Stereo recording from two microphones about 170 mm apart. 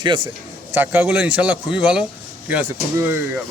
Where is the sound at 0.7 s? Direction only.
10° right (ahead or behind).